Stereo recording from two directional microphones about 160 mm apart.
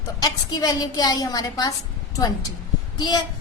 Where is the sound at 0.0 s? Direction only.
25° left (ahead or behind).